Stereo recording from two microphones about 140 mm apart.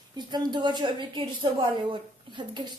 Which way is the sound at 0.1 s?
30° right (ahead or behind).